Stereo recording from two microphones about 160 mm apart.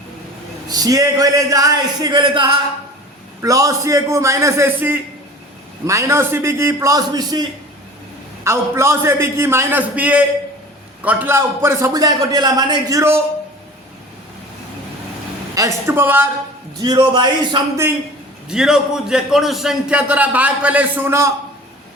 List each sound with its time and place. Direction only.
0.7 s a man's voice: 20° right (ahead or behind)
3.4 s a man's voice: 20° right (ahead or behind)
8.4 s a man's voice: 15° right (ahead or behind)
15.5 s a man's voice: 15° right (ahead or behind)
16.8 s a man's voice: 25° right (ahead or behind)
18.4 s a man's voice: 5° right (ahead or behind)